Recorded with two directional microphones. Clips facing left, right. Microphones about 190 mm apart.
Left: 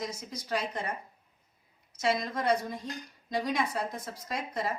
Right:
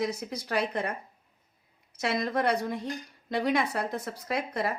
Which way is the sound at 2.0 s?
60° right (ahead or behind).